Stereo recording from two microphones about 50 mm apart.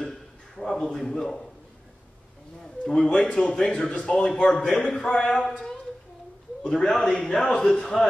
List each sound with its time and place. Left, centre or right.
0.0 s a sound: centre
2.6 s a man's voice: centre
4.3 s a man's voice: centre
5.3 s a man's voice: centre